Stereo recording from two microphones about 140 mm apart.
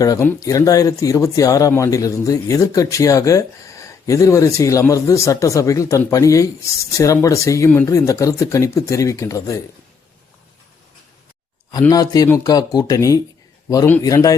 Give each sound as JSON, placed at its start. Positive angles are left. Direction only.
{"t": 0.4, "sound": "speech", "side_deg": 25}
{"t": 11.7, "sound": "speech", "side_deg": 25}